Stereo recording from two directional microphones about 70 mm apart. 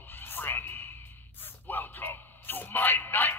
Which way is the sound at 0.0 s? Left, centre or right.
Left.